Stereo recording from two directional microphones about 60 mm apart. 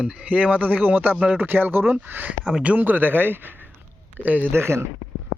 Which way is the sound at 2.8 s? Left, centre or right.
Right.